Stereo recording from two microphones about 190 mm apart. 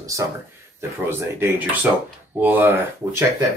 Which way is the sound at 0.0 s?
15° right (ahead or behind).